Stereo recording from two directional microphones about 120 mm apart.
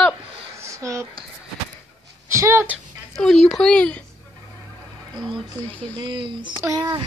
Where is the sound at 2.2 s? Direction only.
25° right (ahead or behind).